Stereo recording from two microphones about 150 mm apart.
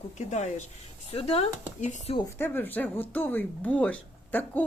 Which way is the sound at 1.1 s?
40° left (ahead or behind).